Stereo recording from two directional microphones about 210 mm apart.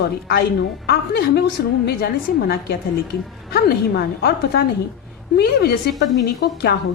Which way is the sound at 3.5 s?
50° left (ahead or behind).